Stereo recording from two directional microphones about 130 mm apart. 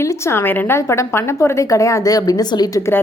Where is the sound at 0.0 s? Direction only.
20° left (ahead or behind).